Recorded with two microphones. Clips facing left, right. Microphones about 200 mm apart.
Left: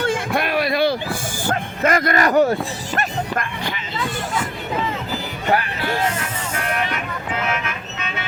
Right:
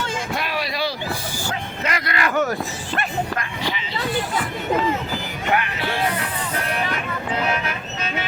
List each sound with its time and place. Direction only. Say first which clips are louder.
0.0 s a sound: left 5 dB; 55° left (ahead or behind)
1.5 s music: left 8 dB; 50° left (ahead or behind)
5.5 s music: left 2 dB; 40° left (ahead or behind)
7.4 s vehicle: right 1 dB; 35° right (ahead or behind)